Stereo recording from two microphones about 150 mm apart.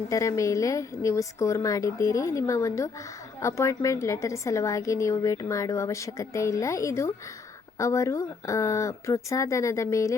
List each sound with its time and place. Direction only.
0.1 s a woman's voice: 20° left (ahead or behind)